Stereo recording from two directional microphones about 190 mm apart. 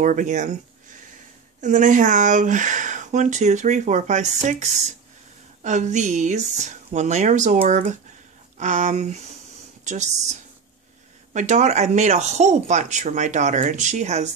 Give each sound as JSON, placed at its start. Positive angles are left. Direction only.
{"t": 0.0, "sound": "speech", "side_deg": -40}
{"t": 11.3, "sound": "speech", "side_deg": -40}